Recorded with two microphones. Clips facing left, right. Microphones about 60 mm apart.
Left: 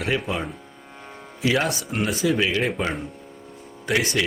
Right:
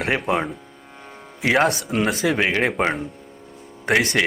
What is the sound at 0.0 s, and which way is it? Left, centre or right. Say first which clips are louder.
Speech: right 4 dB; right.